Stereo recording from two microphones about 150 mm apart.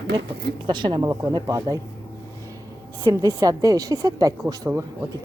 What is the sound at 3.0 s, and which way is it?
A woman's voice, 25° right (ahead or behind).